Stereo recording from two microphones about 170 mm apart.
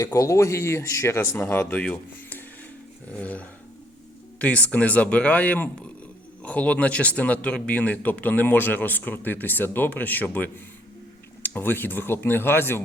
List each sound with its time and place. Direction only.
0.0 s a man's voice: 20° left (ahead or behind)